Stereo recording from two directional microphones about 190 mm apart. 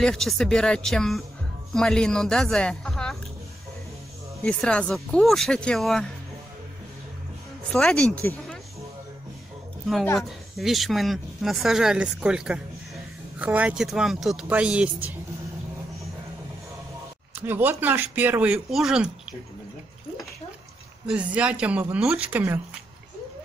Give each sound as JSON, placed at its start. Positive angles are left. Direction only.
{"t": 0.0, "sound": "speech", "side_deg": 0}
{"t": 4.4, "sound": "speech", "side_deg": 5}
{"t": 7.7, "sound": "speech", "side_deg": 5}
{"t": 10.1, "sound": "speech", "side_deg": 0}
{"t": 17.4, "sound": "speech", "side_deg": -10}
{"t": 21.1, "sound": "speech", "side_deg": -5}